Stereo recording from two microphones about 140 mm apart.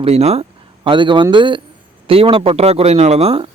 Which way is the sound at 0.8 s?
35° right (ahead or behind).